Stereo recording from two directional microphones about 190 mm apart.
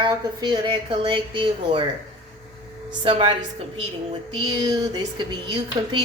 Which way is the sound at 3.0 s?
30° right (ahead or behind).